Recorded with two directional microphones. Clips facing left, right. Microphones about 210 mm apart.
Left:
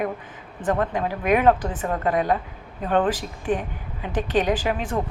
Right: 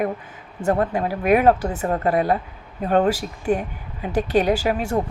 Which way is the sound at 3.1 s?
10° right (ahead or behind).